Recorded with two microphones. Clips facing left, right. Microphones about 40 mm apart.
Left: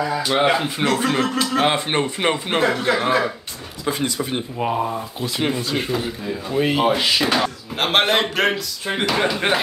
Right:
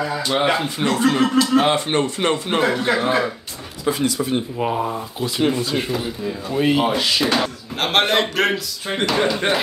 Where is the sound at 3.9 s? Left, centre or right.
Left.